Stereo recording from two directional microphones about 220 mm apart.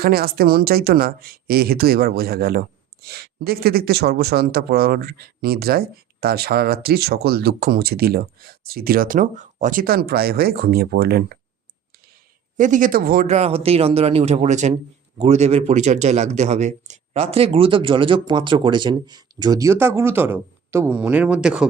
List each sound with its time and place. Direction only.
0.0 s speech: 45° right (ahead or behind)
12.5 s speech: 35° right (ahead or behind); by 21.7 s 5° right (ahead or behind)